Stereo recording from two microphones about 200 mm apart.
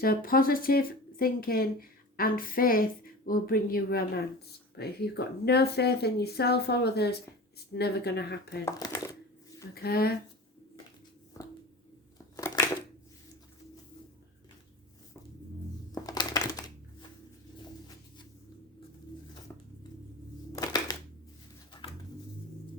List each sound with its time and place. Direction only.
0.0 s speech: 45° left (ahead or behind)
8.6 s speech: 15° left (ahead or behind)
9.7 s speech: 50° left (ahead or behind)
15.9 s a sound: 20° left (ahead or behind)
19.5 s scissors: 15° left (ahead or behind)
20.5 s a sound: 20° left (ahead or behind)